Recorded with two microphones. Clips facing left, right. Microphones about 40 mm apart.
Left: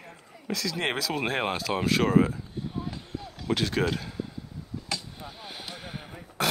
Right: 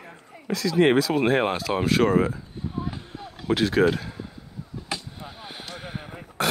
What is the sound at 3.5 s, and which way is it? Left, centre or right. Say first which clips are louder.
Speech: right 6 dB; centre.